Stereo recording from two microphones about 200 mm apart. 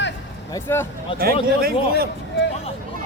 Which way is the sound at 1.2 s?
50° right (ahead or behind).